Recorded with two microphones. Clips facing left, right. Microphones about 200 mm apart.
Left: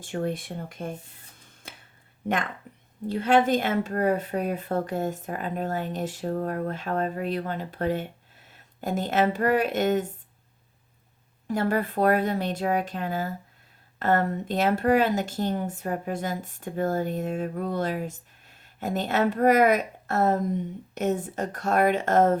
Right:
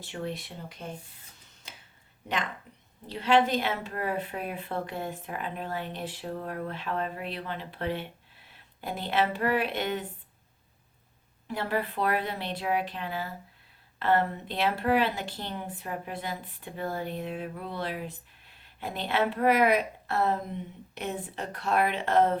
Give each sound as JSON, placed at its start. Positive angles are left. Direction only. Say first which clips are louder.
{"t": 0.0, "sound": "speech", "louder": "left 6 dB", "side_deg": 50}
{"t": 1.6, "sound": "a sound", "louder": "left 4 dB", "side_deg": 50}
{"t": 3.1, "sound": "speech", "louder": "left 3 dB", "side_deg": 50}
{"t": 11.4, "sound": "speech", "louder": "left 5 dB", "side_deg": 45}